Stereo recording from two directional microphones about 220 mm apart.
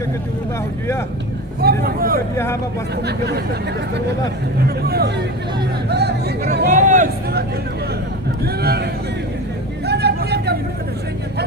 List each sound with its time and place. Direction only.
1.6 s speech: 45° right (ahead or behind)
2.3 s speech: 10° left (ahead or behind)
4.6 s speech: 45° right (ahead or behind)
9.8 s vehicle: 50° right (ahead or behind)